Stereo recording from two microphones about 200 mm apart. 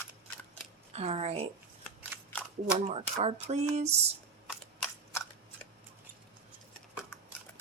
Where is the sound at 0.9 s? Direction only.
30° right (ahead or behind).